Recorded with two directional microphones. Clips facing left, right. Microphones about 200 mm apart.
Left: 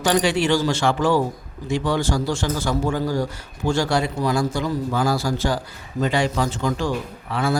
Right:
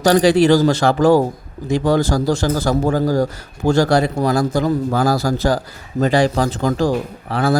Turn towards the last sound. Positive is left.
turn(degrees=-35)  # may be behind; listen again after turning